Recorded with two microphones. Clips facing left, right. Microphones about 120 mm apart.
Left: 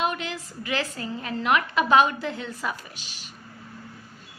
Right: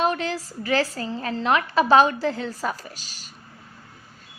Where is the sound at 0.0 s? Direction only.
35° right (ahead or behind).